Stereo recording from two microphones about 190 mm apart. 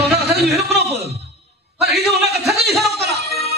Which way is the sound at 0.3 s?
60° right (ahead or behind).